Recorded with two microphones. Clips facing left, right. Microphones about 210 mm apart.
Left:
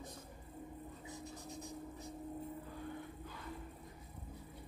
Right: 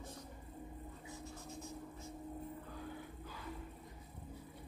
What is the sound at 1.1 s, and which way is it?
Writing, 20° left (ahead or behind).